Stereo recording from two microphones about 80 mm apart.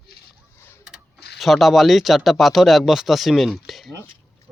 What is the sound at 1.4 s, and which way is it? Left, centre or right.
Speech, centre.